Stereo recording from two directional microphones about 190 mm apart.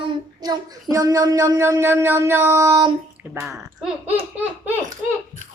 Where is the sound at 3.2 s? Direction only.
10° right (ahead or behind).